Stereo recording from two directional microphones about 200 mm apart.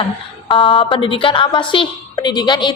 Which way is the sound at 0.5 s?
25° left (ahead or behind).